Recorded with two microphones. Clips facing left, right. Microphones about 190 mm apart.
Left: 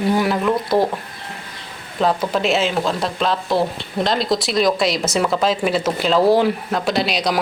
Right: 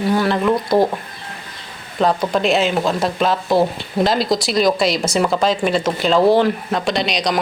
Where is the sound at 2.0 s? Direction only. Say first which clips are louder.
Right 2 dB; centre (ahead or behind).